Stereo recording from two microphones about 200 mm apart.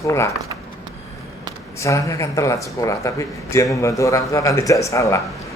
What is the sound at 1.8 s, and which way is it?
A man's voice, 15° left (ahead or behind).